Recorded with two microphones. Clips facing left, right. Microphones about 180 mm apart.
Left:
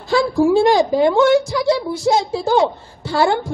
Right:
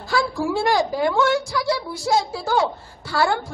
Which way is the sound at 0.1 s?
25° left (ahead or behind).